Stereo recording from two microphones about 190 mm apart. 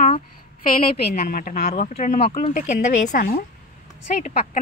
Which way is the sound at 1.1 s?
45° left (ahead or behind).